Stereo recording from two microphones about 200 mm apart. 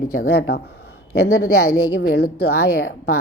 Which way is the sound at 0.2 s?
55° left (ahead or behind).